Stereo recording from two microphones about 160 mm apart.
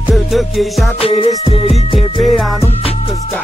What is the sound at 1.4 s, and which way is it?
Music, 35° left (ahead or behind).